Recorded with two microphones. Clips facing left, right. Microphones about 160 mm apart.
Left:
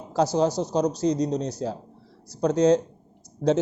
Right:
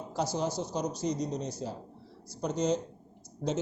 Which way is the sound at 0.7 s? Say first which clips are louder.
Left 9 dB; 80° left.